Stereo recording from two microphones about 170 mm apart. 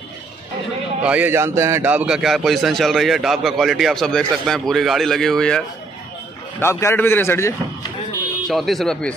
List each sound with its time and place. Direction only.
1.0 s a man's voice: 10° right (ahead or behind)
6.6 s a man's voice: 15° left (ahead or behind)
8.5 s a man's voice: centre (ahead or behind)